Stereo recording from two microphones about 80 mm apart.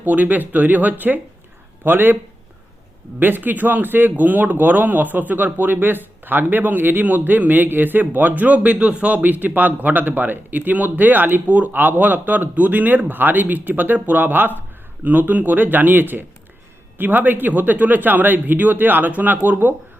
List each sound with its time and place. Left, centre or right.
0.0 s speech: right
3.2 s speech: right